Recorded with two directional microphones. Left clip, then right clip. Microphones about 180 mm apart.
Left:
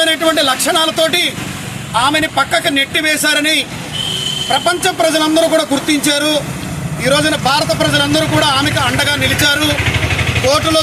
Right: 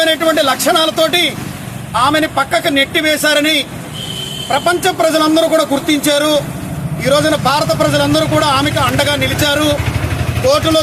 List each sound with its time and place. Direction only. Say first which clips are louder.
0.0 s a man's voice: even; 5° right (ahead or behind)